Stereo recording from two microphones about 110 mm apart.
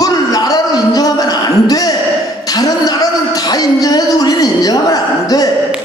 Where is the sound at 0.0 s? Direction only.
35° left (ahead or behind).